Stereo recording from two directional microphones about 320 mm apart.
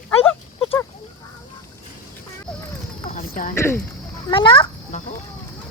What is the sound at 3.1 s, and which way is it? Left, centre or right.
Clip-clop, left.